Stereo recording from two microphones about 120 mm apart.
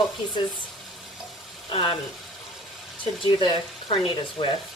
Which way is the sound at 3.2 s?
45° left (ahead or behind).